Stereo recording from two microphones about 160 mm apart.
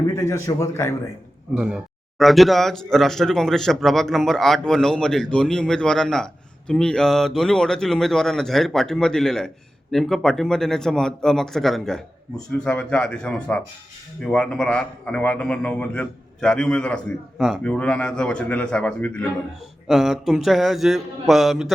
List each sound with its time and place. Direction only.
0.3 s a man's voice: 20° left (ahead or behind)
1.5 s a man's voice: 5° right (ahead or behind)